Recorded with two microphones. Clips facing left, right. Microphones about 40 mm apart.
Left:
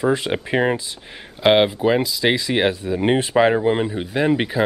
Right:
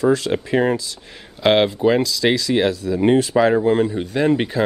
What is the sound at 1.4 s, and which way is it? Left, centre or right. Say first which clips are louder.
Speech: even; centre.